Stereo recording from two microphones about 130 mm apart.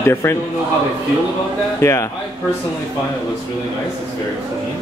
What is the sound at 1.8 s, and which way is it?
Speech, 20° left (ahead or behind).